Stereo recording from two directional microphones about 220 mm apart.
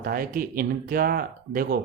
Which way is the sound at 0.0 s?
40° right (ahead or behind).